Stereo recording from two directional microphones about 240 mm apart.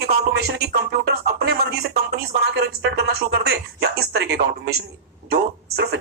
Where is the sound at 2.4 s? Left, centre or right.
Right.